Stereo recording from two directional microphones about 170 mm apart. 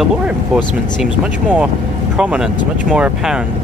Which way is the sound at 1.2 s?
5° right (ahead or behind).